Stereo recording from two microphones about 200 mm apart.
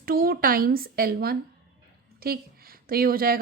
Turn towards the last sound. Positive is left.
turn(degrees=-45)  # may be behind; listen again after turning